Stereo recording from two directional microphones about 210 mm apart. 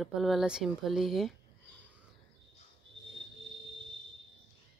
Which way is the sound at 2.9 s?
60° right (ahead or behind).